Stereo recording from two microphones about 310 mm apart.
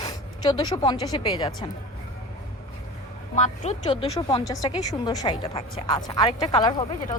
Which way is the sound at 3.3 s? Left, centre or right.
Left.